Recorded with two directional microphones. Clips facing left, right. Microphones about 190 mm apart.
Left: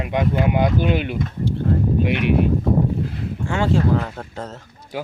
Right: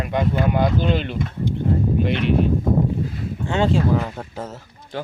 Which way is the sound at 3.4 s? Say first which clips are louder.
Even; 20° right (ahead or behind).